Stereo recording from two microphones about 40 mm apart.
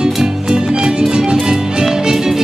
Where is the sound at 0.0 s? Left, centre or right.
Centre.